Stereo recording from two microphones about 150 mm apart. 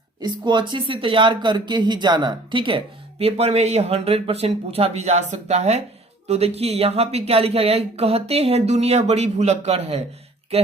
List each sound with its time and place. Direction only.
0.2 s speech: 30° right (ahead or behind)